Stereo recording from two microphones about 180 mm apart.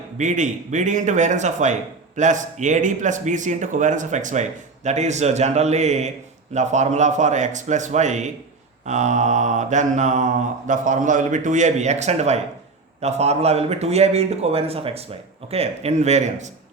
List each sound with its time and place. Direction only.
0.2 s a man's voice: 45° right (ahead or behind)
6.5 s mantra: 40° right (ahead or behind)